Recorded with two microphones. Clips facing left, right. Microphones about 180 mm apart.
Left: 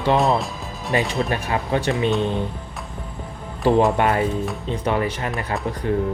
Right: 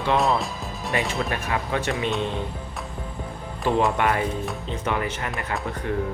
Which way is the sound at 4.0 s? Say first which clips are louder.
Left 4 dB; 30° left (ahead or behind).